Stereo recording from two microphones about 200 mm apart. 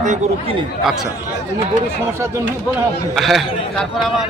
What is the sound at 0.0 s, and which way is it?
Speech, 40° right (ahead or behind).